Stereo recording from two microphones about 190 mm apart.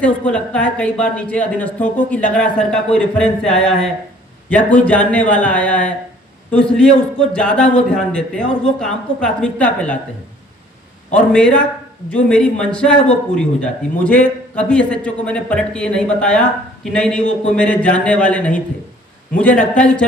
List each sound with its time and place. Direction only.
0.0 s a man's voice: 5° left (ahead or behind)
11.3 s a man's voice: 5° left (ahead or behind)
19.7 s a man's voice: 5° left (ahead or behind)